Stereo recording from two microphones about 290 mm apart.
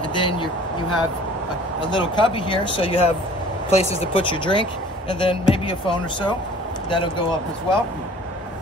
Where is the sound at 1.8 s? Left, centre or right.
Centre.